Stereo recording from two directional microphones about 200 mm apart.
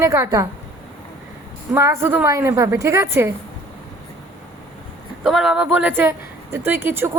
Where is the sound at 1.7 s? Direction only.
15° right (ahead or behind).